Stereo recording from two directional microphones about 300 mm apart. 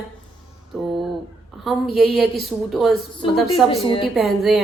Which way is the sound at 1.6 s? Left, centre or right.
Centre.